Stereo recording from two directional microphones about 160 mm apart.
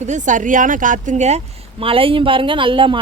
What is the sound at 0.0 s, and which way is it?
Speech, 50° right (ahead or behind).